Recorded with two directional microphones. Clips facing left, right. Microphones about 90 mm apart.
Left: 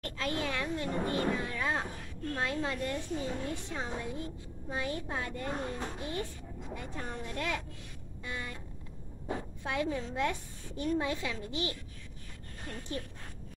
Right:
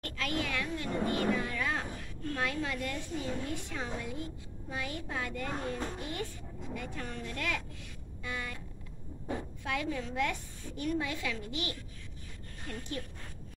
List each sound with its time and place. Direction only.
0.2 s a woman's voice: 30° left (ahead or behind)
9.6 s a woman's voice: 25° left (ahead or behind)